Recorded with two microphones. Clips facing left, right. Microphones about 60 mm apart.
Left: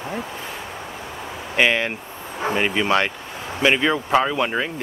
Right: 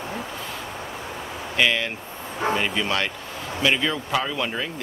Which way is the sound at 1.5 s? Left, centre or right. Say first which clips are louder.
Left 3 dB; left.